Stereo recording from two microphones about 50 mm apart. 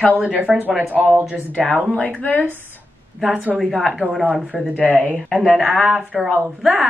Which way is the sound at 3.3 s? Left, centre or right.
Right.